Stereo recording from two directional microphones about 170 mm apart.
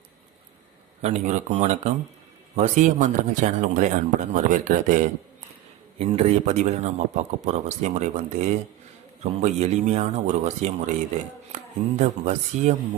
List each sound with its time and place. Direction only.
1.0 s a man's voice: 45° right (ahead or behind)
9.2 s a man's voice: 40° right (ahead or behind)